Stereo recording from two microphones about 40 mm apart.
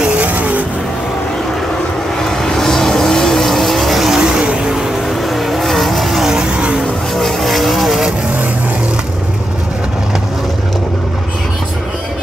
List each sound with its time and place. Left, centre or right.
0.1 s vehicle: right
2.2 s vehicle: centre
4.1 s vehicle: centre
5.3 s vehicle: centre
6.3 s vehicle: right
7.2 s vehicle: centre